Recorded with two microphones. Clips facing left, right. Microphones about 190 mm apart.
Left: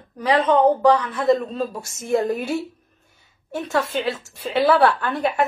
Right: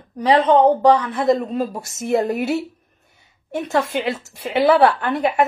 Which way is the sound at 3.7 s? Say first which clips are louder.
Right 2 dB; 20° right (ahead or behind).